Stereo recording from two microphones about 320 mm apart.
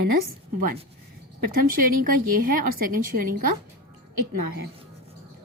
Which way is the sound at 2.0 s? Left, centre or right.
Right.